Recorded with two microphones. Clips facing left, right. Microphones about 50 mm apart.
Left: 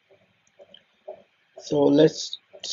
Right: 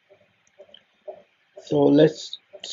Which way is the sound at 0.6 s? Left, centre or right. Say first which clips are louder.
Right 2 dB; right.